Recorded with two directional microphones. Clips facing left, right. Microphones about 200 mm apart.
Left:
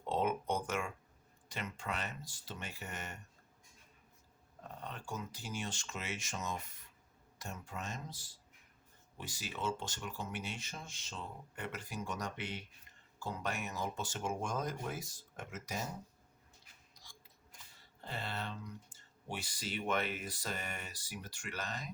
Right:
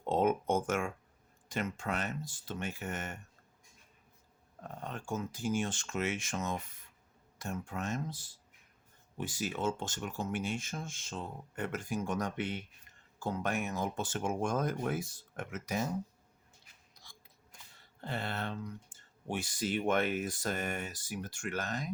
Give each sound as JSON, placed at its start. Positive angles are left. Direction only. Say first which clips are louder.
{"t": 0.0, "sound": "a sound", "louder": "right 5 dB", "side_deg": -50}
{"t": 1.5, "sound": "speech", "louder": "right 6 dB", "side_deg": -50}
{"t": 4.6, "sound": "speech", "louder": "right 4 dB", "side_deg": -50}
{"t": 9.1, "sound": "speech", "louder": "right 8 dB", "side_deg": -50}
{"t": 18.0, "sound": "speech", "louder": "right 5 dB", "side_deg": -55}